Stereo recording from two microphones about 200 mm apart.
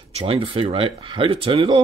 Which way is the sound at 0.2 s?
25° right (ahead or behind).